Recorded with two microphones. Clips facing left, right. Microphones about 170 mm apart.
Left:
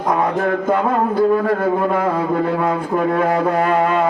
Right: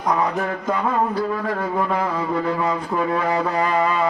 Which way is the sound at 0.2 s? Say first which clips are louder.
Left 5 dB; 55° left (ahead or behind).